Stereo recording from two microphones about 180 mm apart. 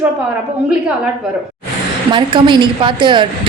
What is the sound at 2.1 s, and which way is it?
A woman's voice, 25° right (ahead or behind).